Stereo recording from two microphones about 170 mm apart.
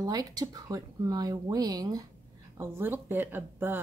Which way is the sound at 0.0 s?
20° right (ahead or behind).